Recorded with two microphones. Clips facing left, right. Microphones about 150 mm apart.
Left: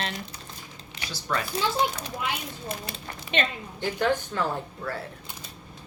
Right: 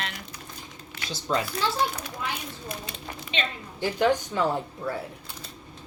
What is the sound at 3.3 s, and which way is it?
Speech, 55° left (ahead or behind).